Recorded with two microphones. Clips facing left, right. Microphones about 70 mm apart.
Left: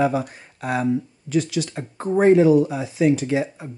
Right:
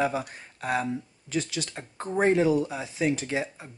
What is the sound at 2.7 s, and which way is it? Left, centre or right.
Speech, centre.